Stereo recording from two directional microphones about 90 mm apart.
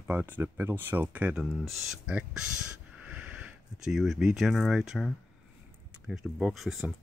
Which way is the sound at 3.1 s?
15° right (ahead or behind).